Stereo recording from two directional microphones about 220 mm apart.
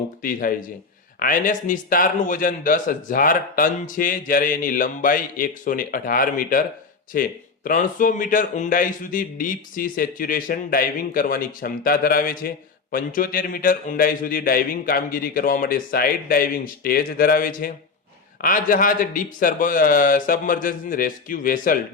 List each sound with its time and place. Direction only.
0.2 s a man's voice: 40° left (ahead or behind)